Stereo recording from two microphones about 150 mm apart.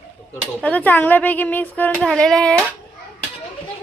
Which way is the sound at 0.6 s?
10° left (ahead or behind).